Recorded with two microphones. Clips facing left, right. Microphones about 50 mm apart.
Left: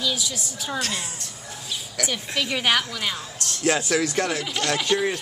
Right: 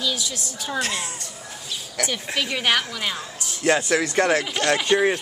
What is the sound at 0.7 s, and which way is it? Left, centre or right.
Speech, right.